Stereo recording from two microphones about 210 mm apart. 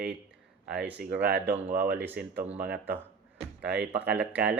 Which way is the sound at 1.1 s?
50° right (ahead or behind).